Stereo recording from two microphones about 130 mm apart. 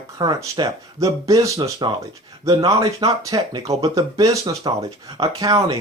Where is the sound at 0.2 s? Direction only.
30° right (ahead or behind).